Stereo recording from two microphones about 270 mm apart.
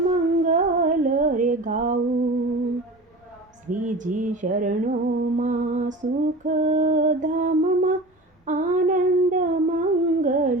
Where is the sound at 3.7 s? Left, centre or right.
Right.